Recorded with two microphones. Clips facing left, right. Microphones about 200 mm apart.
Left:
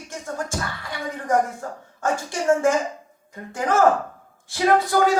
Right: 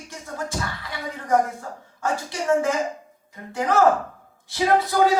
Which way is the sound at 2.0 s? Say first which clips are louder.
Left 3 dB; 50° left (ahead or behind).